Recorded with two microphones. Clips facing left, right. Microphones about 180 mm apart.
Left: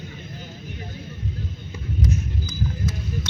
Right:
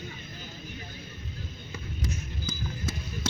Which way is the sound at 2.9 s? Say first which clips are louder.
Left 5 dB; 30° right (ahead or behind).